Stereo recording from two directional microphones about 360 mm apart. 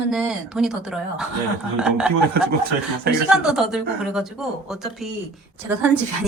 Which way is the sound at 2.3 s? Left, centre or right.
Right.